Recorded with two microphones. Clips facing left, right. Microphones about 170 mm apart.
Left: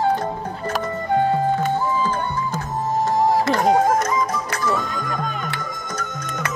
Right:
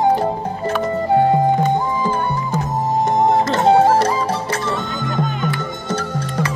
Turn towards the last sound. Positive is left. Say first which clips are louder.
# right 5 dB
turn(degrees=-25)  # may be behind; listen again after turning